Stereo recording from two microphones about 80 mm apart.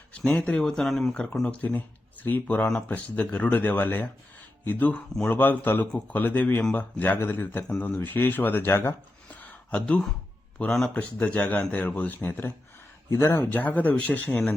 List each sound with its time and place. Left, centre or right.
0.3 s speech: centre
0.6 s a man's voice: centre; by 9.0 s left
9.3 s a sound: centre
10.7 s speech: centre
10.9 s a man's voice: centre
13.1 s a man's voice: left